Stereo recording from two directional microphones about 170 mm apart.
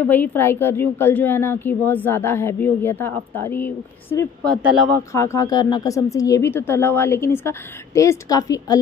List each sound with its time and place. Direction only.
0.0 s a woman's voice: 10° left (ahead or behind)
4.6 s speech: 10° right (ahead or behind)
4.9 s a woman's voice: 15° left (ahead or behind)